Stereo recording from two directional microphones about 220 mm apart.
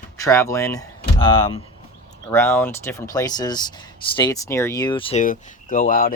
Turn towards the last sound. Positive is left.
turn(degrees=35)  # may be behind; listen again after turning